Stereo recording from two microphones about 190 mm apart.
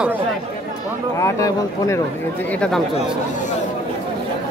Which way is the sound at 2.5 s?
5° left (ahead or behind).